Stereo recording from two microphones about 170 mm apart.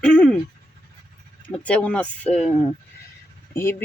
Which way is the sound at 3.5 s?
15° left (ahead or behind).